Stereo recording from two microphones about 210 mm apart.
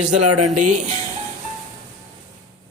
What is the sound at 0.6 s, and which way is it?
Speech, 35° right (ahead or behind).